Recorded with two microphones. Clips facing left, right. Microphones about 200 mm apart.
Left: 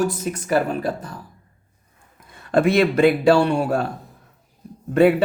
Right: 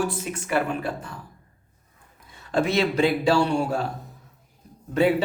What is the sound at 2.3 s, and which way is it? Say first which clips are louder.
Speech: left 6 dB; 55° left (ahead or behind).